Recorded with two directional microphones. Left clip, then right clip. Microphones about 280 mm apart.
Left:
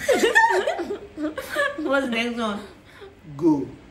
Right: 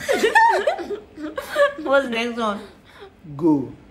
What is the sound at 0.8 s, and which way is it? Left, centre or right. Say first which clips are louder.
Speech: left 1 dB; centre.